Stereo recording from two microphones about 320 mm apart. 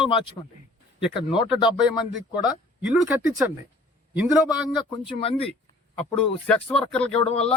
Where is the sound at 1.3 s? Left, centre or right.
Centre.